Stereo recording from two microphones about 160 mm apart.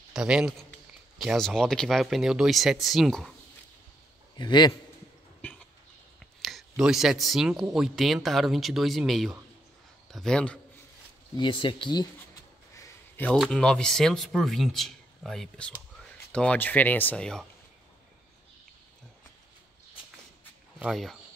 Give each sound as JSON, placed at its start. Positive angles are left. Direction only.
{"t": 0.1, "sound": "a man's voice", "side_deg": -5}
{"t": 4.4, "sound": "a man's voice", "side_deg": 25}
{"t": 5.4, "sound": "cough", "side_deg": 10}
{"t": 6.1, "sound": "a man's voice", "side_deg": 0}
{"t": 11.3, "sound": "speech", "side_deg": 30}
{"t": 12.7, "sound": "a sound", "side_deg": 10}
{"t": 13.4, "sound": "a man's voice", "side_deg": 5}
{"t": 20.8, "sound": "a man's voice", "side_deg": 0}